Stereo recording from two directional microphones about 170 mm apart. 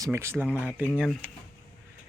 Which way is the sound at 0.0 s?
15° right (ahead or behind).